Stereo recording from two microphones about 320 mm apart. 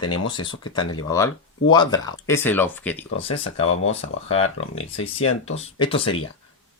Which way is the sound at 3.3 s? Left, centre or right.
Centre.